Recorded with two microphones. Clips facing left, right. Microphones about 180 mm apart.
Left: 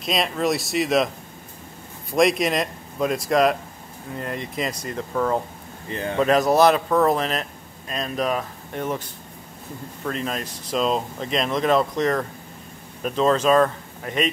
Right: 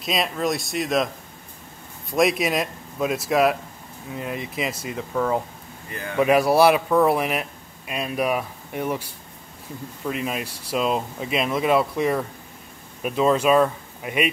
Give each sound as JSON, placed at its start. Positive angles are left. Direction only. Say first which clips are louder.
{"t": 0.0, "sound": "speech", "louder": "left 1 dB", "side_deg": 0}
{"t": 5.9, "sound": "speech", "louder": "left 6 dB", "side_deg": 25}
{"t": 6.1, "sound": "speech", "louder": "right 1 dB", "side_deg": -10}